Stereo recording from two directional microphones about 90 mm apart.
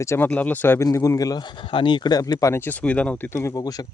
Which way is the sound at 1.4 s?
65° left (ahead or behind).